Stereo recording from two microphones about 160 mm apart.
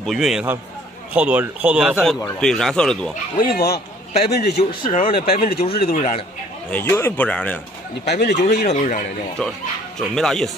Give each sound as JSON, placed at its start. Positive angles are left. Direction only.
{"t": 0.0, "sound": "a man's voice", "side_deg": 0}
{"t": 3.3, "sound": "speech", "side_deg": 70}
{"t": 5.9, "sound": "speech", "side_deg": 45}
{"t": 6.7, "sound": "speech", "side_deg": 15}
{"t": 8.1, "sound": "speech", "side_deg": 90}
{"t": 8.6, "sound": "speech", "side_deg": 50}
{"t": 9.4, "sound": "speech", "side_deg": 5}